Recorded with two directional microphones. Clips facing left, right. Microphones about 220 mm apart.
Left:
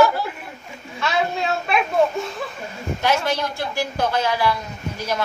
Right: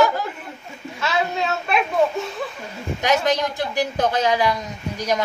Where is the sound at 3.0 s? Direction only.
15° right (ahead or behind).